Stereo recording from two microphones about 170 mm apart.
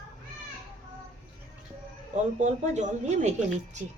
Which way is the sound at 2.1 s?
45° right (ahead or behind).